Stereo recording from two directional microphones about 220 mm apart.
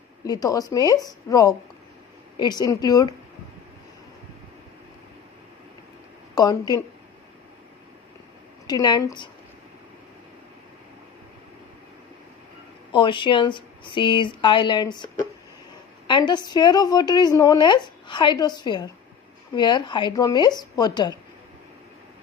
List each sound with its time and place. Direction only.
0.3 s a woman's voice: 15° left (ahead or behind)
6.3 s a woman's voice: 15° left (ahead or behind)
8.6 s a woman's voice: 20° left (ahead or behind)
12.9 s a woman's voice: 20° left (ahead or behind)